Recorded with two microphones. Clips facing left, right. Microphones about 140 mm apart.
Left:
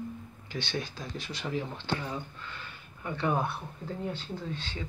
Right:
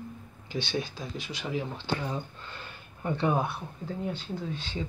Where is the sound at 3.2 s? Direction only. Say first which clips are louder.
Right 1 dB; 10° right (ahead or behind).